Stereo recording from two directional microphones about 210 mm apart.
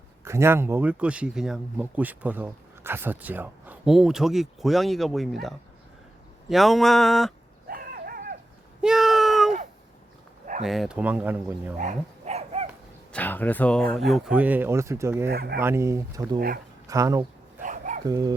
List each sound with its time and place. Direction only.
0.3 s speech: 10° right (ahead or behind)
7.7 s dog: 45° right (ahead or behind)
8.8 s a sound: centre (ahead or behind)
10.6 s speech: centre (ahead or behind)
11.8 s dog: 35° right (ahead or behind)
13.1 s speech: 10° left (ahead or behind); by 15.3 s 10° right (ahead or behind)
15.3 s speech: 50° right (ahead or behind)
15.6 s speech: 15° right (ahead or behind)
17.6 s dog: 40° right (ahead or behind)
18.0 s speech: 20° right (ahead or behind)